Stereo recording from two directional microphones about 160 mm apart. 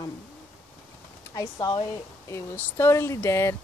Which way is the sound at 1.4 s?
20° left (ahead or behind).